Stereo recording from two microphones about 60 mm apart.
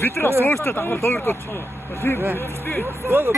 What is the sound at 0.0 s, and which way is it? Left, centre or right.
Speech, left.